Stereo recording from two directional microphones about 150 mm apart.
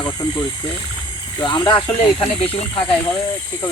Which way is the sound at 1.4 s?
25° left (ahead or behind).